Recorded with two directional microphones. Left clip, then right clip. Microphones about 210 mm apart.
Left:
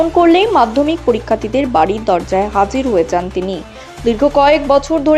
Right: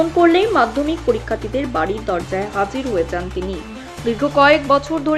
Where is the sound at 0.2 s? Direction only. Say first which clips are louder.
Left 4 dB; 30° left (ahead or behind).